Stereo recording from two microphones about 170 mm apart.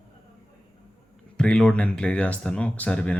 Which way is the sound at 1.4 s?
5° left (ahead or behind).